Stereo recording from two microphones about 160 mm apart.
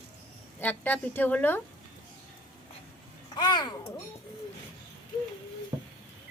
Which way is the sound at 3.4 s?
25° left (ahead or behind).